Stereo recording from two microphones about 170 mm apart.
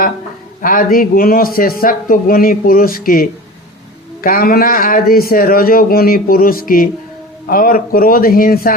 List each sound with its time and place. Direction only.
0.6 s speech: 55° left (ahead or behind)